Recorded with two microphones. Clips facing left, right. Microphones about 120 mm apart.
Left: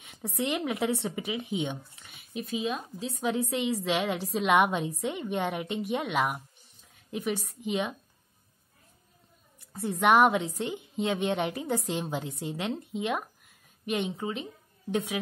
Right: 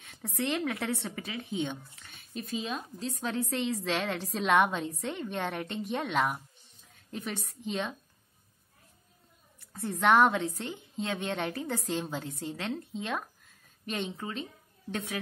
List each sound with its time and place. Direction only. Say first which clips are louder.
0.0 s a woman's voice: left 2 dB; 15° left (ahead or behind)
9.6 s a woman's voice: left 2 dB; 15° left (ahead or behind)